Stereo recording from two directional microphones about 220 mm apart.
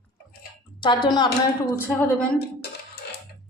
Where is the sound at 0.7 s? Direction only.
20° left (ahead or behind).